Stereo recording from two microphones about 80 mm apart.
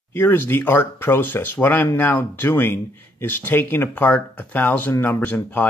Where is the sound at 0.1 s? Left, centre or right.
Left.